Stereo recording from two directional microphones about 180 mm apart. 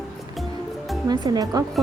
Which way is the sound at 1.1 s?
20° right (ahead or behind).